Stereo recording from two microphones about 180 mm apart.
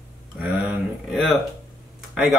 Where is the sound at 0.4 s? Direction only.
5° right (ahead or behind).